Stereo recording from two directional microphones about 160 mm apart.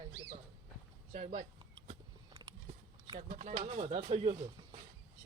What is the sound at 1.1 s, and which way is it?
Speech, 45° right (ahead or behind).